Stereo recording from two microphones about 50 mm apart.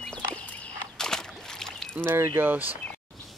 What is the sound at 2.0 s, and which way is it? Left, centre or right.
Speech, right.